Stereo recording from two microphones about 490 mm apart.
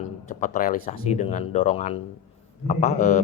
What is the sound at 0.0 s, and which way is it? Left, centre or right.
Speech, centre.